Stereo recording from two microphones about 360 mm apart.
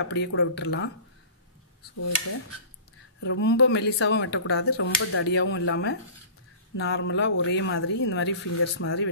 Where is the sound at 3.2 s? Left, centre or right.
Left.